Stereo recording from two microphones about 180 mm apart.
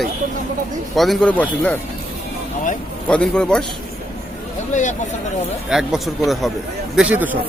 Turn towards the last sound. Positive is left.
turn(degrees=-10)  # may be behind; listen again after turning